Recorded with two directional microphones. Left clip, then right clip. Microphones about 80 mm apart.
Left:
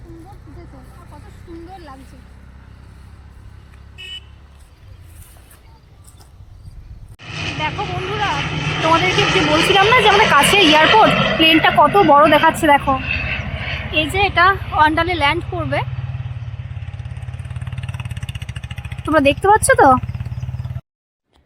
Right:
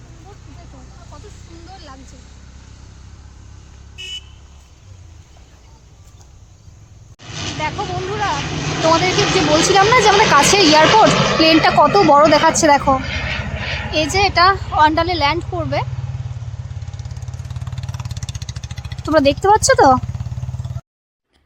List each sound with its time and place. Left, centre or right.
1.6 s a sound: right
3.9 s vehicle: centre
7.2 s vehicle: centre
9.6 s speech: centre
11.4 s speech: centre
13.9 s speech: centre
14.5 s speech: centre
17.8 s vehicle: right
18.9 s speech: centre